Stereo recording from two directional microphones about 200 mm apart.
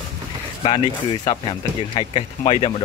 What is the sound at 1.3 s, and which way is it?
Speech, 25° left (ahead or behind).